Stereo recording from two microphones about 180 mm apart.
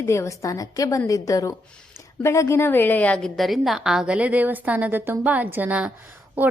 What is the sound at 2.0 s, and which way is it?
A woman's voice, 15° left (ahead or behind).